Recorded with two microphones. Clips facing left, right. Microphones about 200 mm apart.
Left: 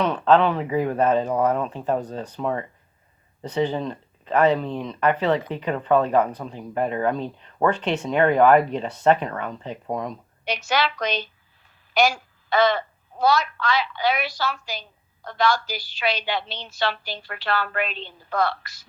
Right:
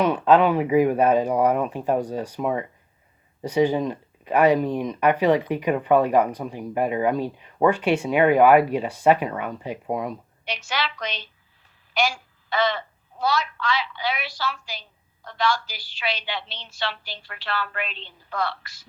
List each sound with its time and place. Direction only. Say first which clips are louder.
0.0 s speech: right 1 dB; 10° right (ahead or behind)
10.4 s a woman's voice: left 5 dB; 45° left (ahead or behind)